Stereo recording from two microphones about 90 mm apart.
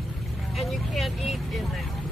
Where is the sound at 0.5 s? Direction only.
Centre (ahead or behind).